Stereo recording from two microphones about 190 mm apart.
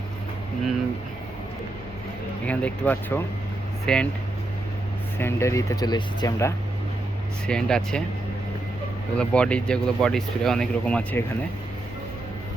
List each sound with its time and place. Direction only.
2.5 s speech: 10° left (ahead or behind)
5.1 s speech: 15° left (ahead or behind)
7.4 s speech: 5° left (ahead or behind)
9.1 s speech: 5° left (ahead or behind)